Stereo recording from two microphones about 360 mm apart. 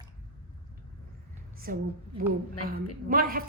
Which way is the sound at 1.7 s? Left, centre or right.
Right.